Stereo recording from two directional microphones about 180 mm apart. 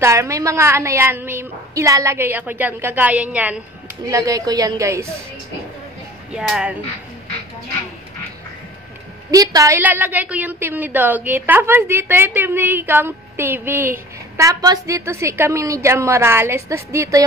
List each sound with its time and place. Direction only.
0.0 s a woman's voice: 15° right (ahead or behind)
4.1 s a woman's voice: 20° right (ahead or behind)
6.3 s speech: 5° right (ahead or behind)
9.3 s a woman's voice: 20° right (ahead or behind)